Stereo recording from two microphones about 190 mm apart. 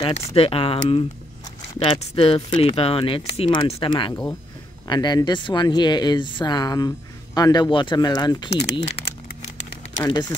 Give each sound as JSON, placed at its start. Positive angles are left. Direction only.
{"t": 0.1, "sound": "speech", "side_deg": 30}
{"t": 10.0, "sound": "speech", "side_deg": 15}